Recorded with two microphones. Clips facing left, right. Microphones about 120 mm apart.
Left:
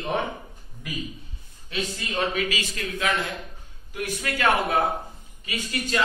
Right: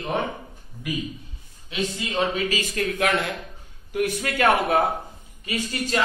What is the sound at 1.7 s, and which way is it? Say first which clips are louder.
Speech: right 3 dB; 15° right (ahead or behind).